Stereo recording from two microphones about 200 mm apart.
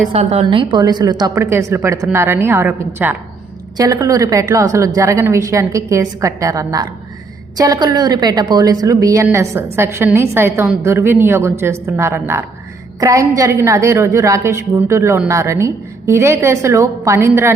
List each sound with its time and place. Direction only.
0.1 s a woman's voice: 30° right (ahead or behind); by 17.5 s 15° right (ahead or behind)